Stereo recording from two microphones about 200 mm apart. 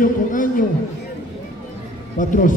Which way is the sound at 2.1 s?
40° left (ahead or behind).